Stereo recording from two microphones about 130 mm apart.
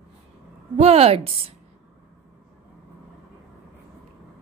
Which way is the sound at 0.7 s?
50° right (ahead or behind).